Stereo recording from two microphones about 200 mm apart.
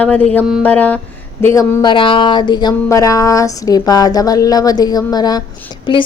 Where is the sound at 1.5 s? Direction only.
20° left (ahead or behind).